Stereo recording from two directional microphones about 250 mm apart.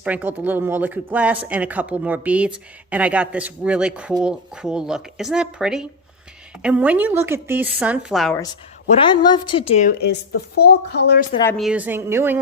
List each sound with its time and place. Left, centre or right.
0.0 s speech: centre
9.0 s a woman's voice: centre
10.0 s speech: left
11.4 s speech: centre